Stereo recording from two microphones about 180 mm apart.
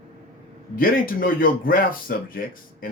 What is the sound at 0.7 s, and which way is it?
Speech, 50° left (ahead or behind).